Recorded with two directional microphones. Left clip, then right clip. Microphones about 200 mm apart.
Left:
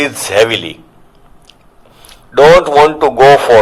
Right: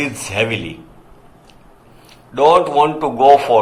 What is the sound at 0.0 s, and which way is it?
Speech, 50° left (ahead or behind).